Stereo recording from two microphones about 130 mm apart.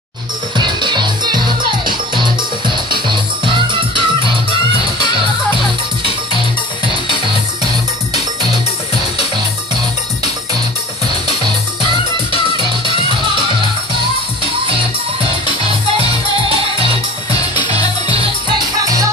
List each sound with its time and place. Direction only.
0.6 s music: 35° right (ahead or behind)
3.1 s music: 40° right (ahead or behind)
11.4 s music: 40° right (ahead or behind)
16.0 s music: 45° right (ahead or behind)